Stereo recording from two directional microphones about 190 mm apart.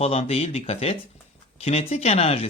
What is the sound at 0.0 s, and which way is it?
Speech, 35° left (ahead or behind).